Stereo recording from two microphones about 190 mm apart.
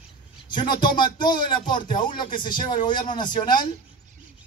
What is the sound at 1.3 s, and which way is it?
Speech, 25° left (ahead or behind).